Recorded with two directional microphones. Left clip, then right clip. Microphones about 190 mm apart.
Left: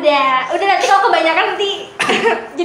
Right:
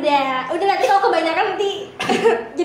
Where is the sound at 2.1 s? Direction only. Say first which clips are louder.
Left 1 dB; 35° right (ahead or behind).